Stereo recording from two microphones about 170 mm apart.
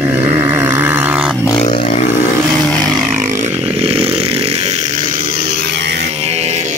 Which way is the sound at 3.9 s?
35° right (ahead or behind).